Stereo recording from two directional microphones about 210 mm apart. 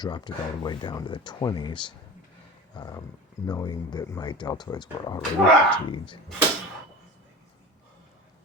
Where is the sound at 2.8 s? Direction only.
20° left (ahead or behind).